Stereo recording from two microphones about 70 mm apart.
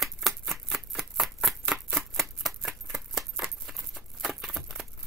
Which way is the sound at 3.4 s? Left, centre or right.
Centre.